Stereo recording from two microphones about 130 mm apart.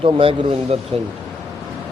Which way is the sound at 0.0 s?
45° right (ahead or behind).